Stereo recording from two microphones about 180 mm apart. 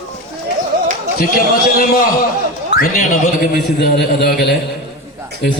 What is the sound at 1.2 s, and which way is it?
A man's voice, 55° left (ahead or behind).